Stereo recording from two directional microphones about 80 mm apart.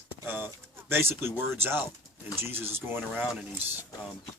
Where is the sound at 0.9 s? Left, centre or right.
Right.